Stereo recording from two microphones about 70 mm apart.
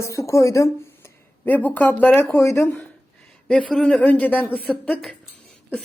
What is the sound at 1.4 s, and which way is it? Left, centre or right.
Speech, left.